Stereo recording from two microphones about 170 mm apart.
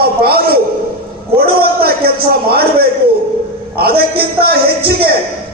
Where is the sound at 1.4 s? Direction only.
65° right (ahead or behind).